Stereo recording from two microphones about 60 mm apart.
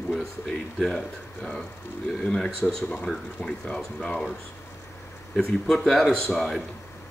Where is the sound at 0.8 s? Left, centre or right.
Centre.